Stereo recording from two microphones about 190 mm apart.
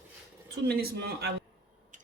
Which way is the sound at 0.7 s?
55° right (ahead or behind).